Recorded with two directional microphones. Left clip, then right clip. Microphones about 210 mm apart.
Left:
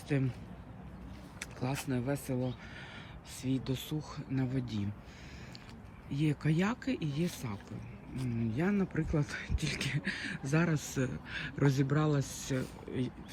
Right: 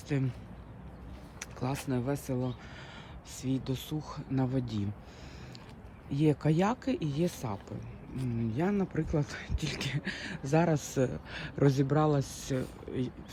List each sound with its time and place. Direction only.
0.1 s speech: 5° right (ahead or behind)
1.4 s vehicle: 10° right (ahead or behind)
1.9 s speech: 10° right (ahead or behind)
6.1 s speech: 25° right (ahead or behind)